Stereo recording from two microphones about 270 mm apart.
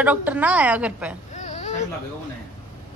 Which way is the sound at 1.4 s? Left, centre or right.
Left.